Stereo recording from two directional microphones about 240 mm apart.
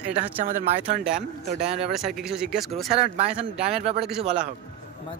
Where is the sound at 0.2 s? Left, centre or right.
Right.